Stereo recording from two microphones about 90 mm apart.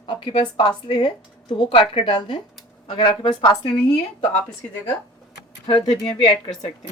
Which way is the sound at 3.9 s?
20° left (ahead or behind).